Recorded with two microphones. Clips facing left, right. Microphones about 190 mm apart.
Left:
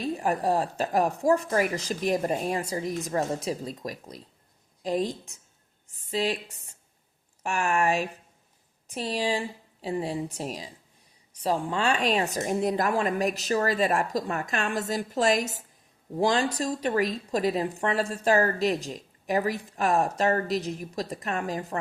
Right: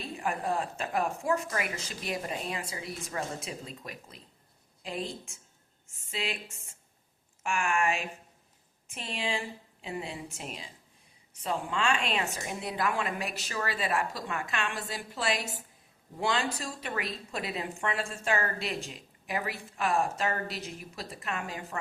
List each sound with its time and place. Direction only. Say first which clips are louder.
0.0 s speech: left 7 dB; 40° left (ahead or behind)
7.4 s speech: left 4 dB; 40° left (ahead or behind)